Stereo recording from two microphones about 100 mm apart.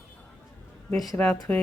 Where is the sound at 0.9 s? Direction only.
Centre (ahead or behind).